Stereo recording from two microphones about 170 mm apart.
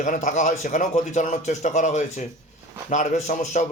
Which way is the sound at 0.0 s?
45° left (ahead or behind).